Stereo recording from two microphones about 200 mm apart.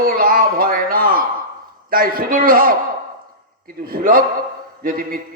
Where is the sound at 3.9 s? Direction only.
45° right (ahead or behind).